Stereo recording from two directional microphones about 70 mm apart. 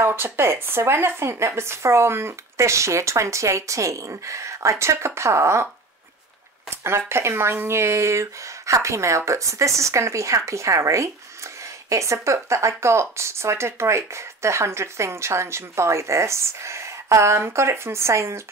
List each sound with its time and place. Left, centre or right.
0.0 s a woman's voice: right
6.7 s a woman's voice: right